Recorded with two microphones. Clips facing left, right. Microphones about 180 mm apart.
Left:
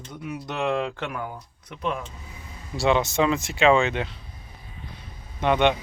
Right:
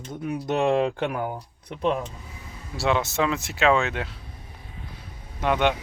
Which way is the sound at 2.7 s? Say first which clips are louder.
Left 2 dB; centre (ahead or behind).